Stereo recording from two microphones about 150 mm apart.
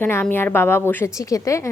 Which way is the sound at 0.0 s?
15° left (ahead or behind).